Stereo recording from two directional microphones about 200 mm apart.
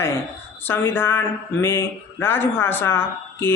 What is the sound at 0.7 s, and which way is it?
Speech, 10° left (ahead or behind).